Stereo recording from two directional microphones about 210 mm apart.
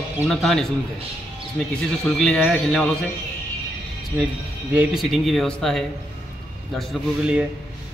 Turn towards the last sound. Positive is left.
turn(degrees=-5)  # may be behind; listen again after turning